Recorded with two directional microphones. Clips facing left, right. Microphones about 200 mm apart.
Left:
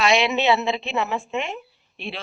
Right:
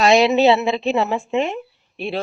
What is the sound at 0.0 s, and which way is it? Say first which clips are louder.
Speech: right 6 dB; 40° right (ahead or behind).